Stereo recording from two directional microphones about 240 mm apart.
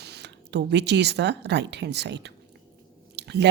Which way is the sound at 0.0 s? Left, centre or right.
Right.